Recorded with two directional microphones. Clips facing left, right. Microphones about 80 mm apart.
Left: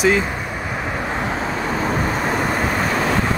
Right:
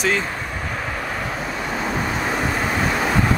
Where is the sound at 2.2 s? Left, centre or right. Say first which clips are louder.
Left 2 dB; centre.